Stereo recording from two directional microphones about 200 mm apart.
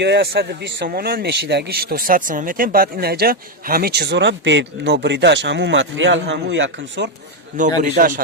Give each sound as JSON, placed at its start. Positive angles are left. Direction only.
{"t": 0.0, "sound": "speech", "side_deg": -55}
{"t": 7.8, "sound": "a man's voice", "side_deg": -40}